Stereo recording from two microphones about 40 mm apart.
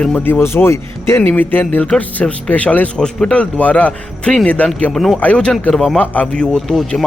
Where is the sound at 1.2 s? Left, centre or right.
Left.